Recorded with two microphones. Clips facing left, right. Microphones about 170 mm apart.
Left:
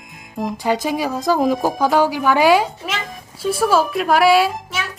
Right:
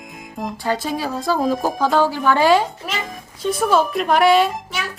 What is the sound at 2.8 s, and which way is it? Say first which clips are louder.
Speech: even; centre (ahead or behind).